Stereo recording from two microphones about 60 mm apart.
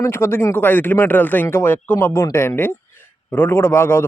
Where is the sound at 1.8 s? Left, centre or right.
Left.